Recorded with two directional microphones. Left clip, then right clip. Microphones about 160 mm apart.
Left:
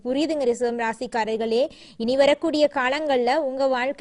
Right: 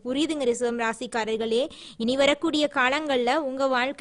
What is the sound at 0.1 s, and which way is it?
A woman's voice, centre (ahead or behind).